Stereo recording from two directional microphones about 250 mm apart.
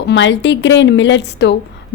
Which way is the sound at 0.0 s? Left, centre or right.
Left.